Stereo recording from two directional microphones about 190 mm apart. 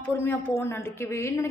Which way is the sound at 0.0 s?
10° left (ahead or behind).